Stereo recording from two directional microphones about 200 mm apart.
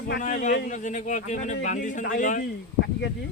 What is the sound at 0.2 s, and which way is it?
Speech, 40° left (ahead or behind).